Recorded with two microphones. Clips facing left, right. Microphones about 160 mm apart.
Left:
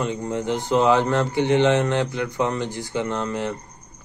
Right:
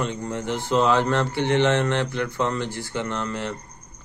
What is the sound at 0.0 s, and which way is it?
Speech, 15° left (ahead or behind).